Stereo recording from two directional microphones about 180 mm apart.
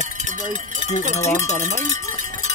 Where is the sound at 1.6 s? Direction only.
40° right (ahead or behind).